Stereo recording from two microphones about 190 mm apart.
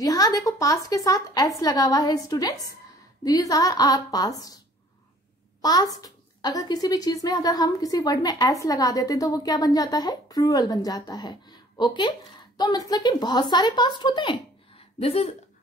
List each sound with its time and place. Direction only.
0.0 s a woman's voice: 20° left (ahead or behind)
5.6 s a child's voice: 20° left (ahead or behind)